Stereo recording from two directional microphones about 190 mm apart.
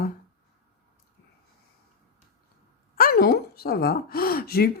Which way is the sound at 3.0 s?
50° left (ahead or behind).